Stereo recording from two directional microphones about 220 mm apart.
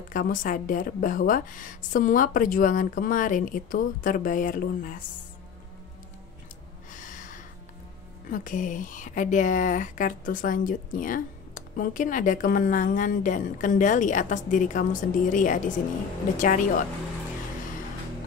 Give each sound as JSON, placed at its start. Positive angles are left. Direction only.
{"t": 0.1, "sound": "speech", "side_deg": 40}
{"t": 6.9, "sound": "snort", "side_deg": 35}
{"t": 8.3, "sound": "speech", "side_deg": 35}